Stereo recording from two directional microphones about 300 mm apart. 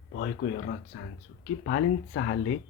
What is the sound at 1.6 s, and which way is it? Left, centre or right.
Speech, left.